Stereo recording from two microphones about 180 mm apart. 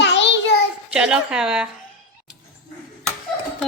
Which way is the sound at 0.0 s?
75° left (ahead or behind).